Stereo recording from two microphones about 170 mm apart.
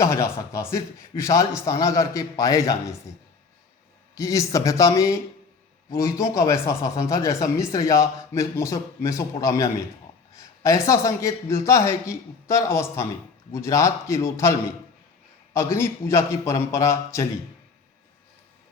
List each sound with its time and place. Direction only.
0.0 s a man's voice: 20° left (ahead or behind)
4.1 s a man's voice: 20° left (ahead or behind)
15.5 s a man's voice: 15° left (ahead or behind)